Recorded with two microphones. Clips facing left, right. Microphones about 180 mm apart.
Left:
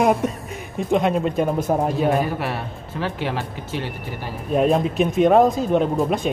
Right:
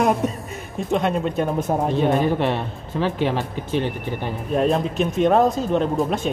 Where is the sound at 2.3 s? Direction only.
25° right (ahead or behind).